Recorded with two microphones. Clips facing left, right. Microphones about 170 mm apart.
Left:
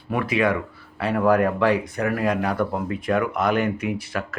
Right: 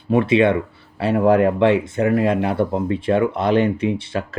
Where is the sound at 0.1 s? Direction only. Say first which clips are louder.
Right 6 dB; 25° right (ahead or behind).